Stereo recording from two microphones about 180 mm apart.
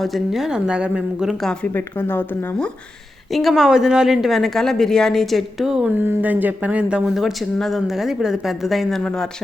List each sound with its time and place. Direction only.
0.0 s a woman's voice: centre (ahead or behind)
3.3 s a woman's voice: centre (ahead or behind)